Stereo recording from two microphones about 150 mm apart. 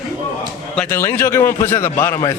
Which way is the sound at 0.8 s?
15° left (ahead or behind).